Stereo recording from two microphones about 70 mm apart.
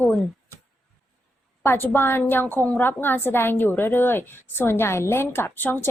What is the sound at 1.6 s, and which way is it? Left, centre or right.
A woman's voice, left.